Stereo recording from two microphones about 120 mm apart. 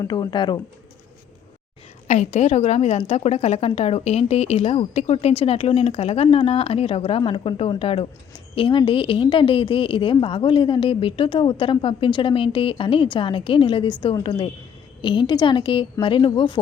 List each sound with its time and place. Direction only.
0.0 s speech: 35° left (ahead or behind)
2.0 s a woman's voice: 70° left (ahead or behind); by 16.6 s 45° left (ahead or behind)